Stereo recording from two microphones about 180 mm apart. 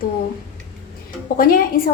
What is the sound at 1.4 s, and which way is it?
Speech, 50° left (ahead or behind).